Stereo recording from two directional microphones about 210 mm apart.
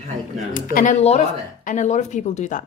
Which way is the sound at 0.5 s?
40° left (ahead or behind).